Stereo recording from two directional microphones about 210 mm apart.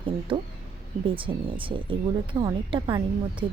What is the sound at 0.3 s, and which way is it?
A woman's voice, 25° right (ahead or behind).